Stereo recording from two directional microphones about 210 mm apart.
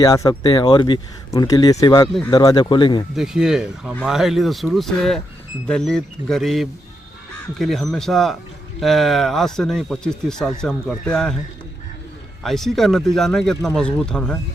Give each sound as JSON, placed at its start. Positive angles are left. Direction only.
{"t": 0.0, "sound": "speech", "side_deg": 15}
{"t": 3.2, "sound": "speech", "side_deg": 0}
{"t": 12.4, "sound": "speech", "side_deg": 0}